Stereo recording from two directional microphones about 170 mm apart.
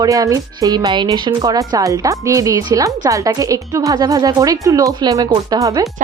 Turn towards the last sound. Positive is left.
turn(degrees=-20)  # may be behind; listen again after turning